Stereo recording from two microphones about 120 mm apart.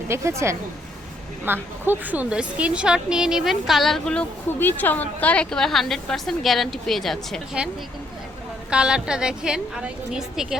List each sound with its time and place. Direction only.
0.1 s a woman's voice: 25° right (ahead or behind); by 7.4 s centre (ahead or behind)
8.7 s a woman's voice: 5° right (ahead or behind)